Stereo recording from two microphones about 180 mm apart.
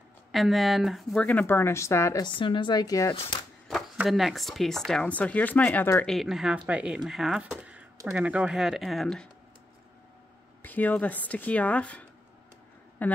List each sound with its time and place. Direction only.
0.3 s speech: centre (ahead or behind); by 3.4 s 25° left (ahead or behind)
3.6 s speech: centre (ahead or behind)
10.6 s speech: 10° left (ahead or behind)